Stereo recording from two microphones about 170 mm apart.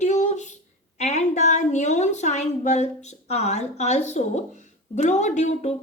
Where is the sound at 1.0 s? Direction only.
40° left (ahead or behind).